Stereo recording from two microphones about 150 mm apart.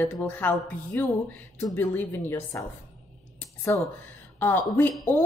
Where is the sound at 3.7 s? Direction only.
15° left (ahead or behind).